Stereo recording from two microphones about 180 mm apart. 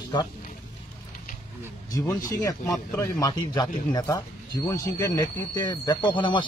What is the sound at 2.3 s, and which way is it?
Speech, 20° left (ahead or behind).